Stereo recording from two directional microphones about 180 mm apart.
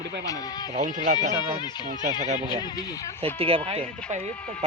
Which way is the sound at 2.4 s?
25° left (ahead or behind).